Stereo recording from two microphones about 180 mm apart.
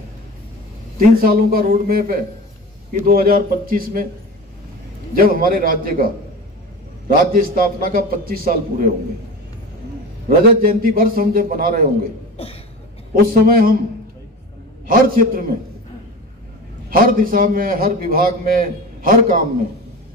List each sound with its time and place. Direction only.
0.9 s a man's voice: 55° right (ahead or behind)
5.1 s a man's voice: 55° right (ahead or behind)
7.1 s a man's voice: 55° right (ahead or behind)
10.6 s a man's voice: 55° right (ahead or behind)
13.1 s a man's voice: 55° right (ahead or behind)
14.9 s a man's voice: 55° right (ahead or behind)
16.9 s a man's voice: 50° right (ahead or behind)